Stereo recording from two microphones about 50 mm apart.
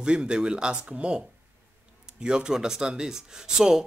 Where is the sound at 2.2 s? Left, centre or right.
Centre.